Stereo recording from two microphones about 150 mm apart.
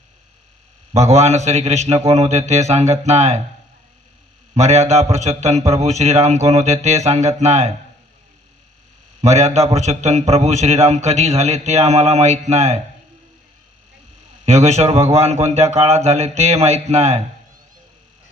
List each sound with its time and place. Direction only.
0.9 s a man's voice: 45° right (ahead or behind)
4.5 s a man's voice: 45° right (ahead or behind)
9.2 s a man's voice: 50° right (ahead or behind)
14.4 s a man's voice: 45° right (ahead or behind)